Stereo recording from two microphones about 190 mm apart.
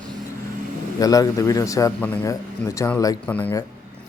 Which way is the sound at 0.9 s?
20° left (ahead or behind).